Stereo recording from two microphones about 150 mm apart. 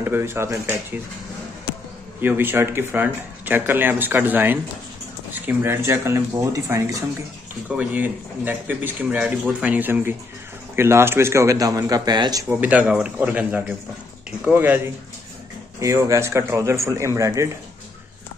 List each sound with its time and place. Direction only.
0.0 s speech: 15° right (ahead or behind)
2.2 s speech: 15° right (ahead or behind)
12.4 s speech: 10° right (ahead or behind)
15.8 s speech: 20° right (ahead or behind)